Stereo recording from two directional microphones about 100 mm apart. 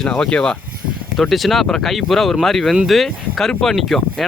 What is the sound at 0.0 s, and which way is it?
Speech, 5° left (ahead or behind).